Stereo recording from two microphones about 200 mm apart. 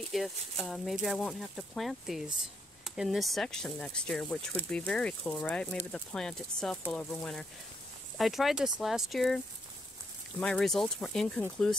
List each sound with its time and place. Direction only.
0.1 s speech: centre (ahead or behind)
10.4 s speech: 5° left (ahead or behind)